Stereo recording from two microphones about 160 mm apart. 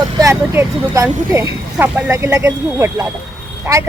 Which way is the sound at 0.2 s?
20° right (ahead or behind).